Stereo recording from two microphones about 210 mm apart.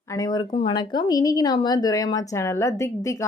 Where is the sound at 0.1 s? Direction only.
15° left (ahead or behind).